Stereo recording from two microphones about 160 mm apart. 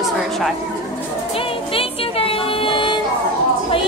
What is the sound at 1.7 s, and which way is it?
Vehicle, 35° left (ahead or behind).